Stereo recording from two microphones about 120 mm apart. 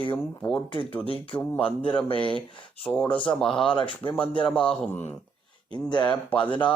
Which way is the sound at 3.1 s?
10° left (ahead or behind).